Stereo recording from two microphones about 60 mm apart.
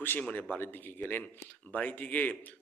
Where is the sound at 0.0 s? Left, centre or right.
Left.